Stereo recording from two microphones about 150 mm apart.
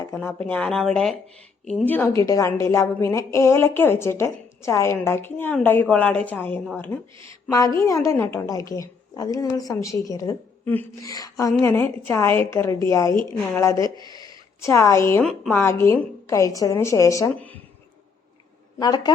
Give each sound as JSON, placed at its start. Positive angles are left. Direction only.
{"t": 0.0, "sound": "a woman's voice", "side_deg": 15}
{"t": 7.8, "sound": "a woman's voice", "side_deg": 20}
{"t": 10.7, "sound": "a woman's voice", "side_deg": 10}
{"t": 11.1, "sound": "a woman's voice", "side_deg": 25}
{"t": 15.2, "sound": "a woman's voice", "side_deg": 5}
{"t": 15.5, "sound": "a woman's voice", "side_deg": 15}
{"t": 18.8, "sound": "a woman's voice", "side_deg": 25}